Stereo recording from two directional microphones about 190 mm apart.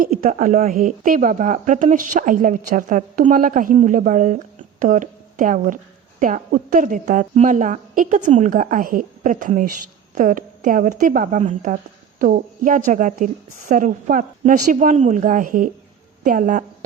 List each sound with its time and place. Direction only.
0.2 s a woman's voice: 40° right (ahead or behind)